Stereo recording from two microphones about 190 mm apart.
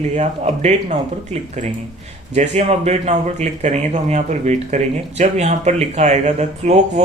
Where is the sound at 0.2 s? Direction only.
35° right (ahead or behind).